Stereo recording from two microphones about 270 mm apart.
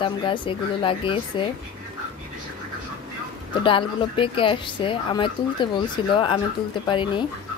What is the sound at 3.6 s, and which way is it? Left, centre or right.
Speech, centre.